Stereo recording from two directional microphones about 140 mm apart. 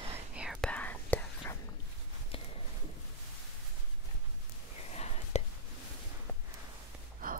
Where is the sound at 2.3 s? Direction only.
40° left (ahead or behind).